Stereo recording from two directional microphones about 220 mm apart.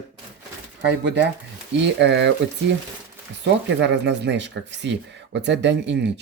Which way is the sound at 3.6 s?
55° right (ahead or behind).